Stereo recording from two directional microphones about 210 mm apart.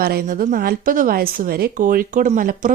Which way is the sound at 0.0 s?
45° right (ahead or behind).